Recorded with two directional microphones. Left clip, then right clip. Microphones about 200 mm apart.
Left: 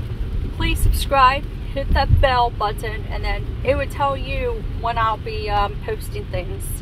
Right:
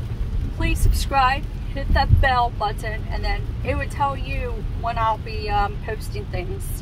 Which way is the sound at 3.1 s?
10° right (ahead or behind).